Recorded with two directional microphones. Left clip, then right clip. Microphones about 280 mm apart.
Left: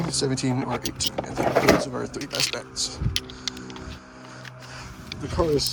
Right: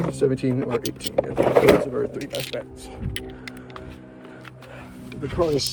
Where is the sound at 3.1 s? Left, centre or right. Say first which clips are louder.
Left 5 dB; centre.